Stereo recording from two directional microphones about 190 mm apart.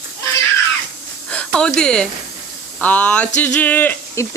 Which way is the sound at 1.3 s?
5° left (ahead or behind).